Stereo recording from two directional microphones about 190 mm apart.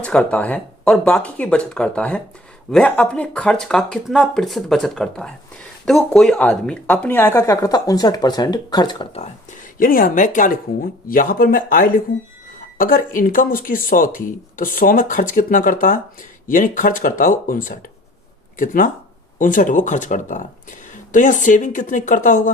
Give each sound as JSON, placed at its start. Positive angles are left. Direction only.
{"t": 0.0, "sound": "speech", "side_deg": 5}
{"t": 9.7, "sound": "speech", "side_deg": 50}